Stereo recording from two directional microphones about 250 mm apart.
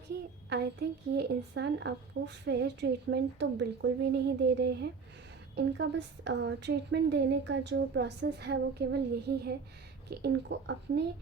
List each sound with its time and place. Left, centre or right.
0.5 s a woman's voice: right